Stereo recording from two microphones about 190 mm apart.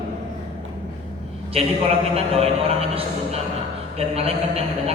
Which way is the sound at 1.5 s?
30° right (ahead or behind).